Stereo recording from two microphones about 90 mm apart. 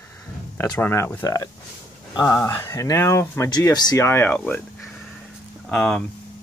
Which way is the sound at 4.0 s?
25° left (ahead or behind).